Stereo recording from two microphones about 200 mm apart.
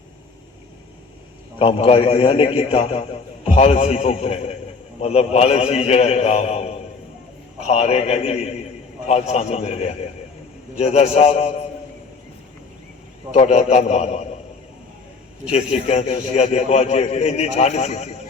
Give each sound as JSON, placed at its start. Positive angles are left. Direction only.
{"t": 1.5, "sound": "a man's voice", "side_deg": 30}
{"t": 13.3, "sound": "a man's voice", "side_deg": 35}
{"t": 15.4, "sound": "a man's voice", "side_deg": 35}